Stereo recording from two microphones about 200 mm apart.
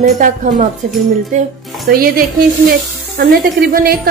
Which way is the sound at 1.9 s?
45° right (ahead or behind).